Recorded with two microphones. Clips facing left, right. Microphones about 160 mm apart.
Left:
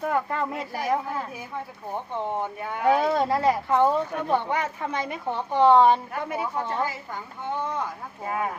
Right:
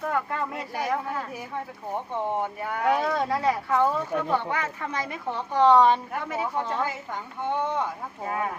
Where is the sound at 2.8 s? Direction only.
25° left (ahead or behind).